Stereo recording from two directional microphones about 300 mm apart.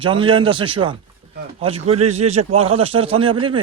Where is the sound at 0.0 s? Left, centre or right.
Centre.